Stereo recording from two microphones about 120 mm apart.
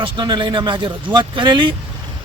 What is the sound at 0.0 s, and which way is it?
Speech, 40° right (ahead or behind).